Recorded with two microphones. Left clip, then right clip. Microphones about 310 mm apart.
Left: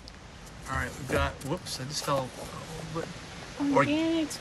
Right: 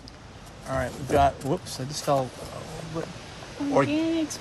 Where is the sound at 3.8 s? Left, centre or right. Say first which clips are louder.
Right 2 dB; centre.